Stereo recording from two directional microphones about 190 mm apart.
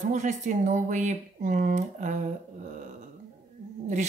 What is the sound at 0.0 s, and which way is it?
Speech, 40° right (ahead or behind).